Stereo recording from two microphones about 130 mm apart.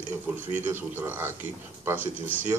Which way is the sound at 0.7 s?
15° right (ahead or behind).